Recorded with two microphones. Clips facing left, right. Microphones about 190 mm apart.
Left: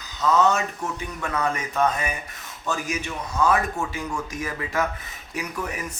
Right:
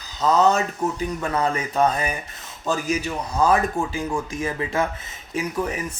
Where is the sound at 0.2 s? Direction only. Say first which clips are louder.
Right 2 dB; 35° right (ahead or behind).